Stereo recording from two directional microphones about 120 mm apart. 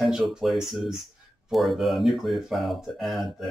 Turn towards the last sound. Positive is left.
turn(degrees=0)  # may be behind; listen again after turning